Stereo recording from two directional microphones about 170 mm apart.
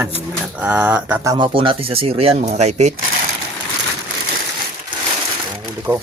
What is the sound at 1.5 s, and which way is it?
Speech, 35° right (ahead or behind).